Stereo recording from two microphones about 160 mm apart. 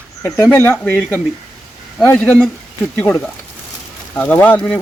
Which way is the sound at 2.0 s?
10° left (ahead or behind).